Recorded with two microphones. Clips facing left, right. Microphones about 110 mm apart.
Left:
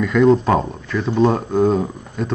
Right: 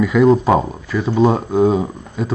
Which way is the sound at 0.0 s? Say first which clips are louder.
Right 1 dB; 5° right (ahead or behind).